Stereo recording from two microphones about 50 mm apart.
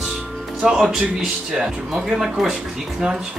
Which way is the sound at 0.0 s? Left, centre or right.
Centre.